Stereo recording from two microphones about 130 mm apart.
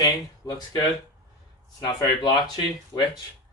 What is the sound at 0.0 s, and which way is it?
Speech, 30° left (ahead or behind).